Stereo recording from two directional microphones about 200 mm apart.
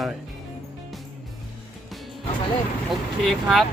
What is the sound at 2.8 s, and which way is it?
Speech, centre (ahead or behind).